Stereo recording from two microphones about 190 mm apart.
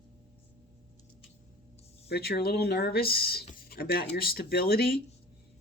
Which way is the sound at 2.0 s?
60° left (ahead or behind).